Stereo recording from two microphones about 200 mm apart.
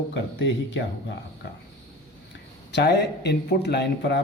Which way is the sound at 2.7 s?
55° left (ahead or behind).